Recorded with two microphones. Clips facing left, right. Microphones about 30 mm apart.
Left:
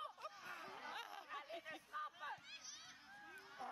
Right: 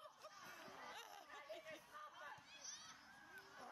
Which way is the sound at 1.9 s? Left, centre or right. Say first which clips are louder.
Left 12 dB; left.